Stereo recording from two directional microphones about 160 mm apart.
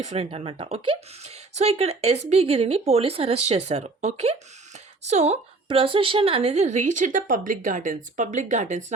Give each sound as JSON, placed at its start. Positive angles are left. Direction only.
{"t": 0.0, "sound": "a woman's voice", "side_deg": -40}